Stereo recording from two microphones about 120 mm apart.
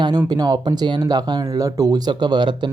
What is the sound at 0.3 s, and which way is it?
Speech, 35° right (ahead or behind).